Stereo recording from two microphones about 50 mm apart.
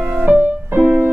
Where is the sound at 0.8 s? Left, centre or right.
Right.